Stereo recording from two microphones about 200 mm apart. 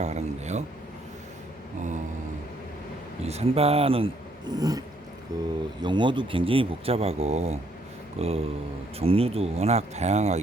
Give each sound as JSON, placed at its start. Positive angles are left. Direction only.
{"t": 0.0, "sound": "speech", "side_deg": -35}
{"t": 3.2, "sound": "speech", "side_deg": -30}